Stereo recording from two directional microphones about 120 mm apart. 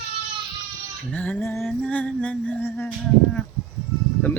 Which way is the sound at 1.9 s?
10° left (ahead or behind).